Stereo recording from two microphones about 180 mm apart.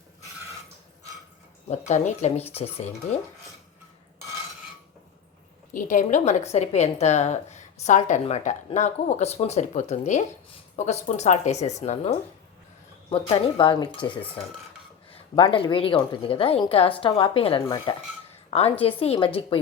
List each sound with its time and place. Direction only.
1.9 s a woman's voice: 40° left (ahead or behind)
5.7 s a woman's voice: 45° left (ahead or behind)